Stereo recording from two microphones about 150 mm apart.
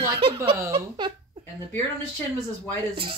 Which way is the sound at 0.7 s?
30° right (ahead or behind).